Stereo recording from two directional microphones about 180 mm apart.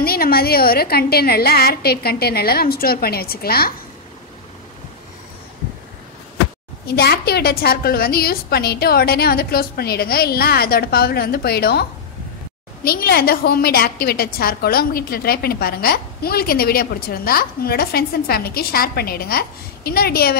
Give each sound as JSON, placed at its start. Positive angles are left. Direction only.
{"t": 0.0, "sound": "a woman's voice", "side_deg": 55}
{"t": 6.9, "sound": "a woman's voice", "side_deg": 60}